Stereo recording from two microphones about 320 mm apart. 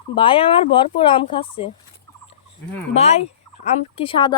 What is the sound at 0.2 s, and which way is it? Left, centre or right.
Speech, centre.